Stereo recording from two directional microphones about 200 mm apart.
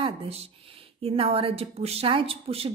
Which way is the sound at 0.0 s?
30° right (ahead or behind).